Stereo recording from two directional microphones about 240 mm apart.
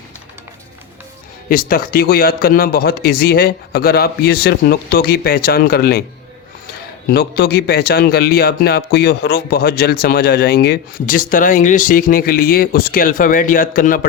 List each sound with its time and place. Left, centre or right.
1.5 s a man's voice: left
7.1 s a man's voice: left